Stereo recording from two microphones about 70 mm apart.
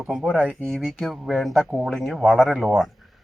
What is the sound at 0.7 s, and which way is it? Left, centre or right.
Speech, centre.